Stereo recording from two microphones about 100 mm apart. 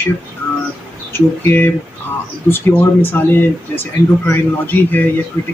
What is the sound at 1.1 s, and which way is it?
Speech, 20° left (ahead or behind).